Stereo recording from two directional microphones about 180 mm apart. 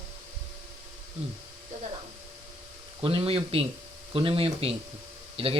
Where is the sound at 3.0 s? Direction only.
30° right (ahead or behind).